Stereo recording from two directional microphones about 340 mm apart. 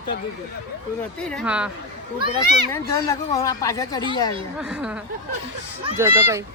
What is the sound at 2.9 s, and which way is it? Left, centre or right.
Speech, centre.